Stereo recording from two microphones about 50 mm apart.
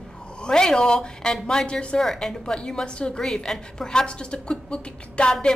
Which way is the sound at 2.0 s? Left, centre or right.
Centre.